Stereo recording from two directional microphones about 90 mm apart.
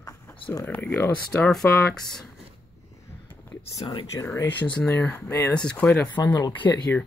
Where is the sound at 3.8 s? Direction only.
65° left (ahead or behind).